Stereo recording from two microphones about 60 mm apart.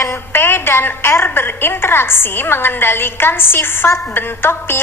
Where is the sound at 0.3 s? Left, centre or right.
Left.